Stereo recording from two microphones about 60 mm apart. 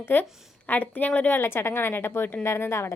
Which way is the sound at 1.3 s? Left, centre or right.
Left.